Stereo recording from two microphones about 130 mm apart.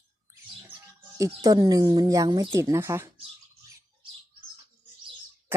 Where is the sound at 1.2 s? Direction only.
25° right (ahead or behind).